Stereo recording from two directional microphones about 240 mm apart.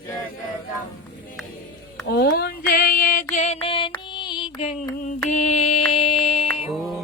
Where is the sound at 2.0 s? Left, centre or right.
Left.